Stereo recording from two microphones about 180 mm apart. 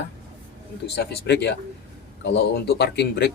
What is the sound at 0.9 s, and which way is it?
Speech, 65° left (ahead or behind).